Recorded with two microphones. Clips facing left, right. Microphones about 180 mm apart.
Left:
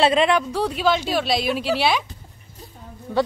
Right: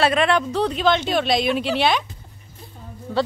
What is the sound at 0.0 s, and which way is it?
Speech, 20° left (ahead or behind).